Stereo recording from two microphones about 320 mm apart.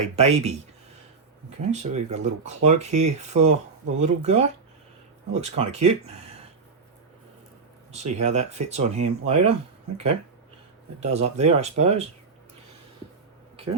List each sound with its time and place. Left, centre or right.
0.2 s speech: centre
7.9 s speech: right
11.0 s speech: centre